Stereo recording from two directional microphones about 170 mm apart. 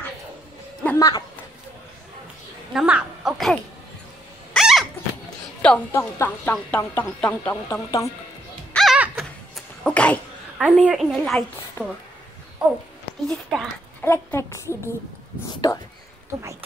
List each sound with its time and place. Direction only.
0.8 s speech: 20° left (ahead or behind)
2.7 s a woman's voice: 5° right (ahead or behind)
4.6 s rodents: centre (ahead or behind)
5.6 s a woman's voice: 5° left (ahead or behind)
8.7 s music: 5° right (ahead or behind)
9.8 s a sound: 5° left (ahead or behind)
10.6 s a woman's voice: 5° right (ahead or behind)
13.3 s a woman's voice: centre (ahead or behind)
14.0 s speech: 15° left (ahead or behind)